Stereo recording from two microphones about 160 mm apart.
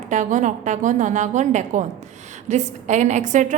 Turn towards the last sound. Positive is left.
turn(degrees=-50)  # may be behind; listen again after turning